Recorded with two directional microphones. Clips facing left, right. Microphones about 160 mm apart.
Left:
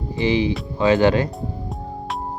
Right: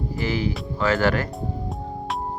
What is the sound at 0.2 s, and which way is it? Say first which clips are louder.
Speech: left 7 dB; 20° left (ahead or behind).